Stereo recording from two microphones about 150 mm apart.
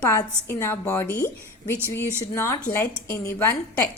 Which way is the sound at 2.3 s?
20° left (ahead or behind).